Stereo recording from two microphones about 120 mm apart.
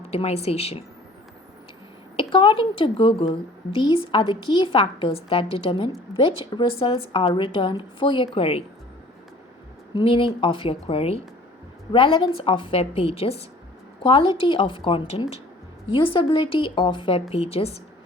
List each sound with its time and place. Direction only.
0.1 s a woman's voice: 55° left (ahead or behind)
2.1 s a woman's voice: 45° left (ahead or behind)
9.9 s a woman's voice: 45° left (ahead or behind)